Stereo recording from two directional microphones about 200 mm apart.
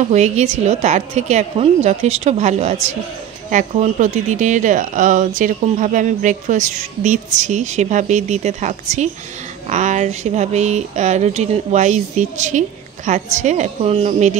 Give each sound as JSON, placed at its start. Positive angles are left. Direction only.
{"t": 0.1, "sound": "speech", "side_deg": -35}